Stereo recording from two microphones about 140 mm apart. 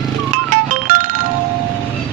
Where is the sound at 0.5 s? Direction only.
75° right (ahead or behind).